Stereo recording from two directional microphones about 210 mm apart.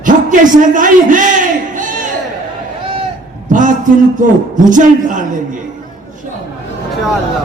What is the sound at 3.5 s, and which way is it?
A man's voice, 35° right (ahead or behind).